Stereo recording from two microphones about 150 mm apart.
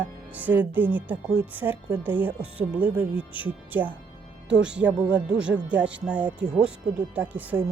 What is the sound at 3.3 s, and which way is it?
Speech, 10° right (ahead or behind).